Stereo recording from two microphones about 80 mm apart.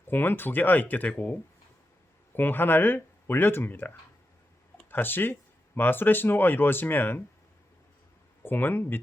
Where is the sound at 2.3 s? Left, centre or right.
Left.